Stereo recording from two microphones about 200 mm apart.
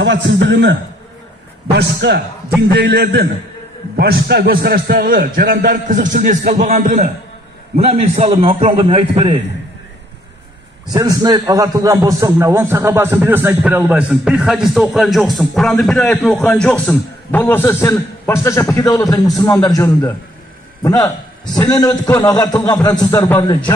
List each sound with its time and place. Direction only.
0.0 s a man's voice: 60° right (ahead or behind); by 7.1 s 40° right (ahead or behind)
7.7 s a man's voice: 30° right (ahead or behind)
10.9 s a man's voice: 20° right (ahead or behind); by 20.1 s 15° left (ahead or behind)
21.5 s a man's voice: 15° left (ahead or behind)